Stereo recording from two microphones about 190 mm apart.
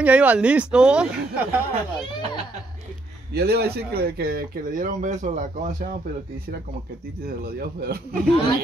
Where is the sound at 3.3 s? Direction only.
55° right (ahead or behind); by 5.9 s 40° right (ahead or behind).